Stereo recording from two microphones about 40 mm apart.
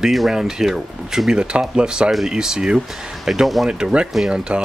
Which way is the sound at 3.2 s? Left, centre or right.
Centre.